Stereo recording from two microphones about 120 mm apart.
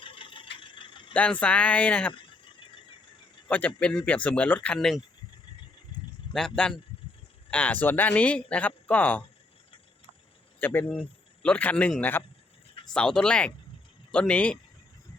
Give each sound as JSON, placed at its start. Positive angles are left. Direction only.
{"t": 0.0, "sound": "vehicle", "side_deg": 45}
{"t": 1.1, "sound": "speech", "side_deg": 10}
{"t": 3.8, "sound": "speech", "side_deg": 10}
{"t": 6.3, "sound": "a man's voice", "side_deg": 5}
{"t": 10.6, "sound": "speech", "side_deg": 15}